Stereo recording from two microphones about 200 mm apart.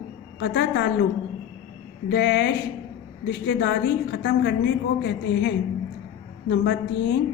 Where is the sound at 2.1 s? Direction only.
60° left (ahead or behind).